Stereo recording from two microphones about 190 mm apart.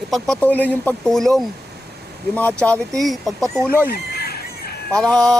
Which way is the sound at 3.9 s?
55° left (ahead or behind).